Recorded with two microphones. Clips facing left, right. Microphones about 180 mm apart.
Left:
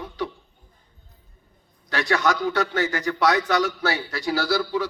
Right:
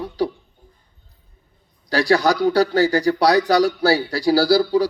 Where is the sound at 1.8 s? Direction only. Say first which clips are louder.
Right 6 dB; 35° right (ahead or behind).